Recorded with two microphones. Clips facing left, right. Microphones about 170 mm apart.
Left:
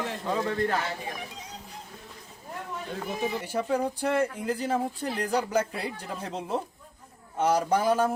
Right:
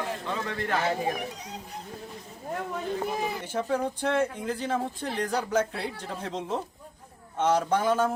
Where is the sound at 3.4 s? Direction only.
10° left (ahead or behind).